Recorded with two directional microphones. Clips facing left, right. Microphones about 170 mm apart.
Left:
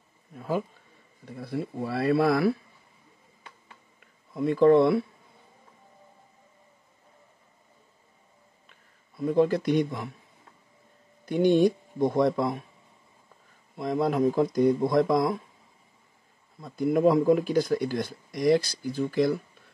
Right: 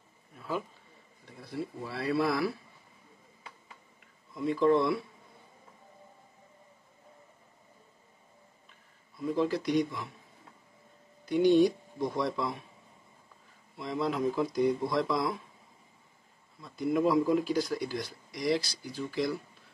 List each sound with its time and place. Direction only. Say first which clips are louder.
0.4 s speech: left 6 dB; 45° left (ahead or behind)
4.4 s speech: left 6 dB; 50° left (ahead or behind)
9.2 s speech: left 6 dB; 55° left (ahead or behind)
11.2 s speech: left 2 dB; 50° left (ahead or behind)
13.7 s speech: left 6 dB; 50° left (ahead or behind)
16.6 s speech: left 5 dB; 50° left (ahead or behind)